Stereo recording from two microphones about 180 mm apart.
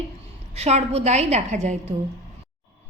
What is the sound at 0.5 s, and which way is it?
A woman's voice, 35° right (ahead or behind).